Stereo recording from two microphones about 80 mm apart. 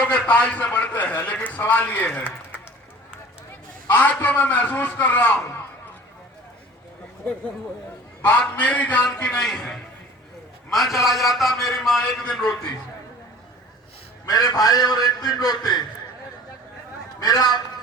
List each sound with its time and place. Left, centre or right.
0.0 s a man's voice: centre
3.9 s a man's voice: left
8.2 s a man's voice: centre
14.3 s a man's voice: left
17.2 s a man's voice: left